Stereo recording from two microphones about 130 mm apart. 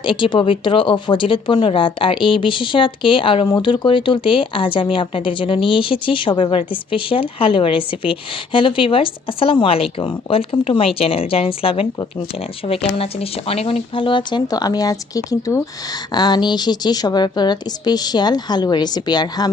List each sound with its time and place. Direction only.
0.0 s speech: 40° left (ahead or behind)